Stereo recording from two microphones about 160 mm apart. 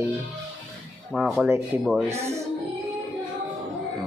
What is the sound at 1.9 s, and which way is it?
Speech, 15° right (ahead or behind).